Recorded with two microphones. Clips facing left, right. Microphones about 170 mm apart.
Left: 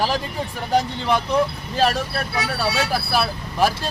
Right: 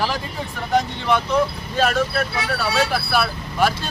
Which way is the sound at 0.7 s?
35° left (ahead or behind).